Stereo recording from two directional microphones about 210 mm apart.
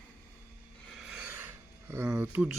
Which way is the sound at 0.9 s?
Centre (ahead or behind).